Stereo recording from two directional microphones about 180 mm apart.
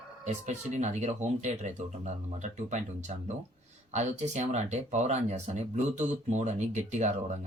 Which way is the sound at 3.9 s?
40° right (ahead or behind).